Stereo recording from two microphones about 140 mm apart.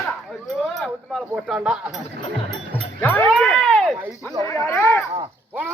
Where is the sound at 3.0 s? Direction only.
15° left (ahead or behind).